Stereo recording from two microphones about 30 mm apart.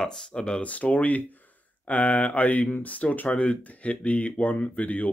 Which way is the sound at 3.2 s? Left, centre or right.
Left.